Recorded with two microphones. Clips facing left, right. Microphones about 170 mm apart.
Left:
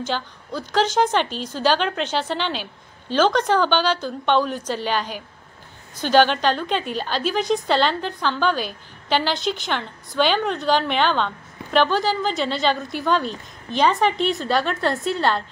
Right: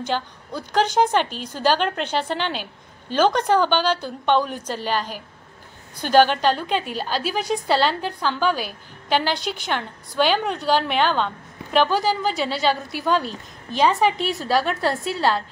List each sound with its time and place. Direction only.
0.7 s a woman's voice: 10° right (ahead or behind)
1.6 s a woman's voice: 45° right (ahead or behind)
3.2 s a woman's voice: 10° right (ahead or behind)
4.7 s a woman's voice: 40° right (ahead or behind)
6.1 s a woman's voice: 5° right (ahead or behind)